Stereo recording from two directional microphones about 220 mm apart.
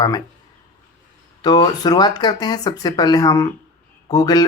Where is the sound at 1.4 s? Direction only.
20° left (ahead or behind).